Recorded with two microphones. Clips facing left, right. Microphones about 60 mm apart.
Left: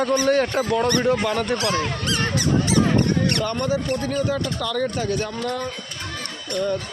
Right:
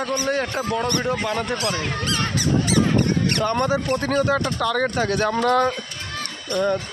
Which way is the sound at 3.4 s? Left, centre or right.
Right.